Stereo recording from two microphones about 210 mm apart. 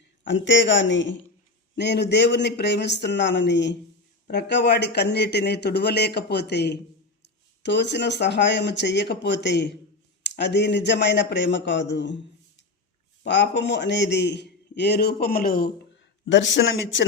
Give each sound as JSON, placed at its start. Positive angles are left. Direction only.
{"t": 0.3, "sound": "a man's voice", "side_deg": 60}
{"t": 13.2, "sound": "a man's voice", "side_deg": 55}
{"t": 16.2, "sound": "a man's voice", "side_deg": 60}